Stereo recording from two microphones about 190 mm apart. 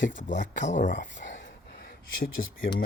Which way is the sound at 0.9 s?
70° left (ahead or behind).